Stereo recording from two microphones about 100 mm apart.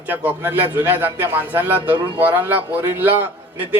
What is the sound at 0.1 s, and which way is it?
A man's voice, 20° right (ahead or behind).